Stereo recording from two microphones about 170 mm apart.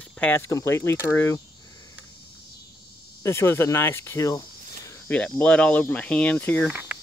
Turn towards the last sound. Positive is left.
turn(degrees=-10)  # may be behind; listen again after turning